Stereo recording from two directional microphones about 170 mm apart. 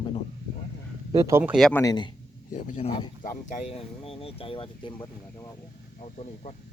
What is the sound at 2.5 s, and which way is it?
Speech, 50° left (ahead or behind).